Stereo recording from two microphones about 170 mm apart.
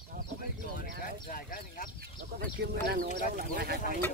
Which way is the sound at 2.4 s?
55° right (ahead or behind).